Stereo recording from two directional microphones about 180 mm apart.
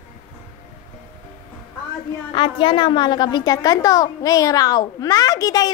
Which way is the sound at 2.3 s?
25° left (ahead or behind).